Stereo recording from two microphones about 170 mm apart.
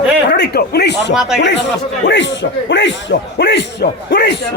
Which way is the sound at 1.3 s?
90° left.